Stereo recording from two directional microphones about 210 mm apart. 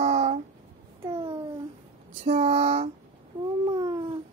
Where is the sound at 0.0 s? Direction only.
30° right (ahead or behind).